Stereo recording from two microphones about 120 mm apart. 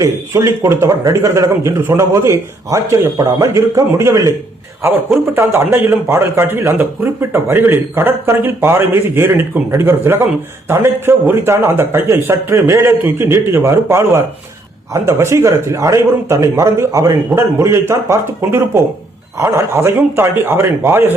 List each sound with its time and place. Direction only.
0.0 s a man's voice: 30° right (ahead or behind)